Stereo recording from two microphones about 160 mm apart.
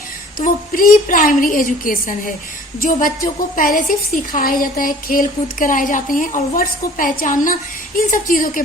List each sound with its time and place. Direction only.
0.3 s a woman's voice: 60° left (ahead or behind)